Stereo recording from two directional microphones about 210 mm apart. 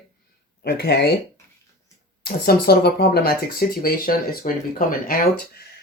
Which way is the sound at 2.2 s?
50° left (ahead or behind).